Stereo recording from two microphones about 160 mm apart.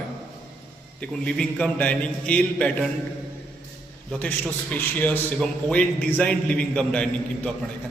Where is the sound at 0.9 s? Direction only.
5° left (ahead or behind).